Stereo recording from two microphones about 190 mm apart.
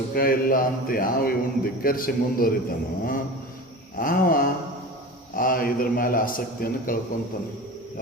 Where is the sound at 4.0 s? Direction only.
50° left (ahead or behind).